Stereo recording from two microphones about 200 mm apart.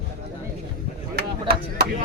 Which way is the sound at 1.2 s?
50° right (ahead or behind).